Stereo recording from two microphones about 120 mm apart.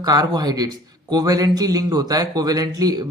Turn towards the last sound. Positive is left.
turn(degrees=-35)  # may be behind; listen again after turning